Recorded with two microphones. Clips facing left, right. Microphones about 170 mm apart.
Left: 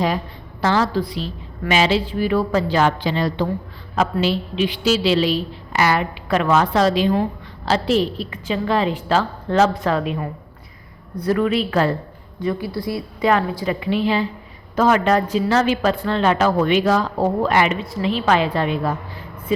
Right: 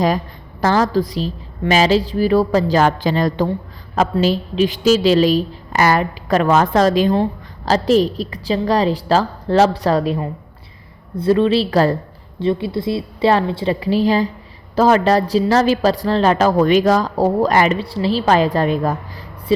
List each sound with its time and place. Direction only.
0.6 s a woman's voice: 40° right (ahead or behind)
12.4 s a woman's voice: 25° right (ahead or behind); by 19.3 s 45° right (ahead or behind)
19.5 s a woman's voice: 30° right (ahead or behind)